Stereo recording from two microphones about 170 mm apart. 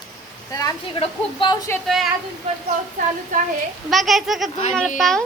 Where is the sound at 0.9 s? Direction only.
30° left (ahead or behind).